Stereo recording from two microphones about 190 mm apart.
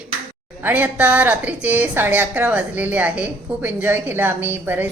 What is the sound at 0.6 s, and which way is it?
A woman's voice, 10° right (ahead or behind).